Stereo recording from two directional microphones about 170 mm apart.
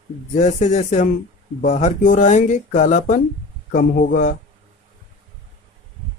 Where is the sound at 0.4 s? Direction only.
40° left (ahead or behind).